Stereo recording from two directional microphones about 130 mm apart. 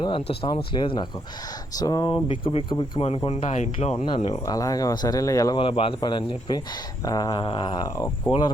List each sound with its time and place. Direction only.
0.0 s speech: 40° left (ahead or behind)
4.4 s speech: 25° left (ahead or behind)
5.5 s speech: 45° left (ahead or behind)